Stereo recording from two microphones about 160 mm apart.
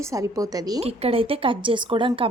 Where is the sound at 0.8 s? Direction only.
40° right (ahead or behind).